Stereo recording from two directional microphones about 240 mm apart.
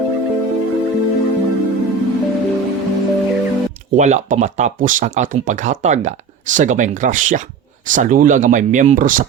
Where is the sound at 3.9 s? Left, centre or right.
Right.